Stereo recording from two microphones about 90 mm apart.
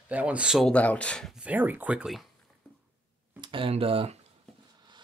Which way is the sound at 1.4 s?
20° right (ahead or behind).